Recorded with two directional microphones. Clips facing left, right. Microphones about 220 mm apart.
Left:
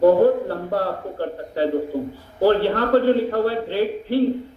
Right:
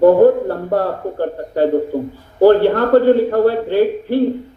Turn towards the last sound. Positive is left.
turn(degrees=-50)  # may be behind; listen again after turning